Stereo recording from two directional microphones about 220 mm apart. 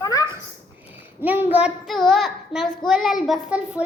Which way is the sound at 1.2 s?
10° right (ahead or behind).